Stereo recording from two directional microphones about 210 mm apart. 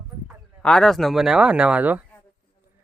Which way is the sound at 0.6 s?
5° left (ahead or behind).